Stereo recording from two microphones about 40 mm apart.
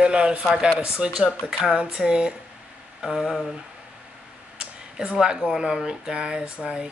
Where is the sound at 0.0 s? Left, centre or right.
Right.